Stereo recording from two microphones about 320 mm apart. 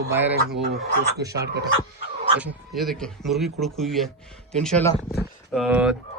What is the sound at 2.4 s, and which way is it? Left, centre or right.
Speech, centre.